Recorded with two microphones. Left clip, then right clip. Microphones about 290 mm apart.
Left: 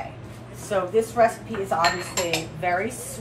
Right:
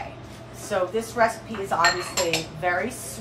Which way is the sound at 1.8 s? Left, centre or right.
Centre.